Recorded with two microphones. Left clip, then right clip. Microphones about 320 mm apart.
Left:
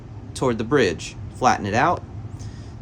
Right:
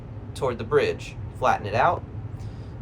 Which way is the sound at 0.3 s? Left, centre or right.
Left.